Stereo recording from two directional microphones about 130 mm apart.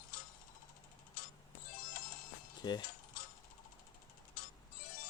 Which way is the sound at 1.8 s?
90° left.